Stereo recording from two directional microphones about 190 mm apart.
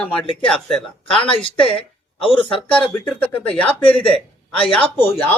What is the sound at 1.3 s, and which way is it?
Speech, 30° left (ahead or behind).